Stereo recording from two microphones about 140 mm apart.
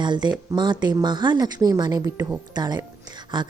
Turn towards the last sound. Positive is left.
turn(degrees=-35)  # may be behind; listen again after turning